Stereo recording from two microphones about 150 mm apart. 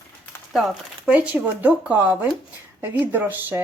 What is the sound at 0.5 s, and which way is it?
Speech, 5° right (ahead or behind).